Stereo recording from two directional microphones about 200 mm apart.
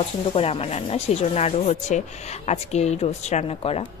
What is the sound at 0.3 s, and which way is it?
Speech, 30° left (ahead or behind).